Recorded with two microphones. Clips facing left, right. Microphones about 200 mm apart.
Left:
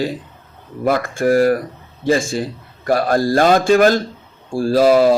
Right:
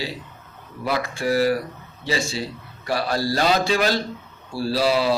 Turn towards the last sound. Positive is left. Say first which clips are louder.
# left 8 dB
turn(degrees=50)  # may be behind; listen again after turning